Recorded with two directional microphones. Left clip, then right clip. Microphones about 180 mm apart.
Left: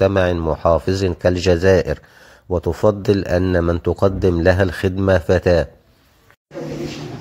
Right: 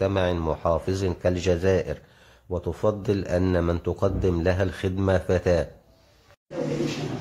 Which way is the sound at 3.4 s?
20° left (ahead or behind).